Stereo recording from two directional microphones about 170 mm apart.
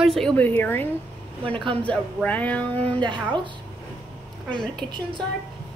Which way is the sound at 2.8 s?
30° right (ahead or behind).